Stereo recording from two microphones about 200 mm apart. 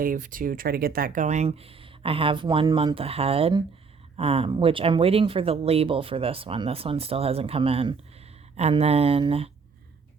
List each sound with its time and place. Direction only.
0.0 s speech: 45° right (ahead or behind)